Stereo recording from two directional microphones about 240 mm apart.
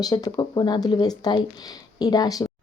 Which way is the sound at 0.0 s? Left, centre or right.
Centre.